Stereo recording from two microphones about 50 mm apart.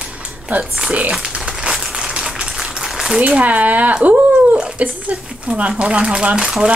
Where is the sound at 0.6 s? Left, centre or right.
Centre.